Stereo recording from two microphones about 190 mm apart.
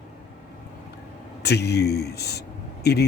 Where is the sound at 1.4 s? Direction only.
60° left (ahead or behind).